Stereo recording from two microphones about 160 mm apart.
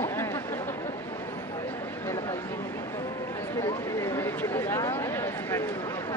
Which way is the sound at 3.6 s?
15° left (ahead or behind).